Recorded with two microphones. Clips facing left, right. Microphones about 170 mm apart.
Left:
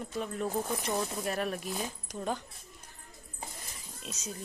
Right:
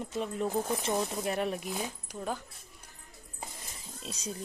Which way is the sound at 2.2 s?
5° right (ahead or behind).